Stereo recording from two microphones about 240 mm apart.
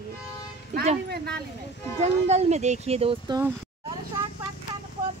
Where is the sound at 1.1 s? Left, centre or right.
Right.